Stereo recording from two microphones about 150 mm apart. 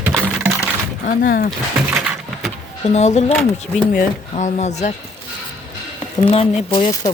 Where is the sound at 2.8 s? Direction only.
50° left (ahead or behind).